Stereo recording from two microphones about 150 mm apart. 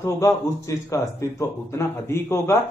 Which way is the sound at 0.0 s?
20° left (ahead or behind).